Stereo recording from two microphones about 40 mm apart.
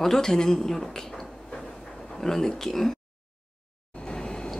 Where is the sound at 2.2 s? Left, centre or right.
Centre.